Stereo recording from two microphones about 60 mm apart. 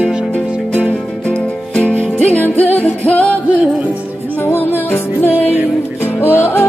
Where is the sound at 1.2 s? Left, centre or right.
Centre.